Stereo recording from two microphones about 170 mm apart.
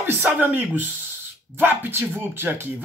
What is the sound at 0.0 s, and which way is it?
Speech, 10° right (ahead or behind).